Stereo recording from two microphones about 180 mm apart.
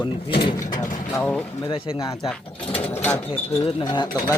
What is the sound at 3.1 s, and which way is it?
Speech, 10° left (ahead or behind).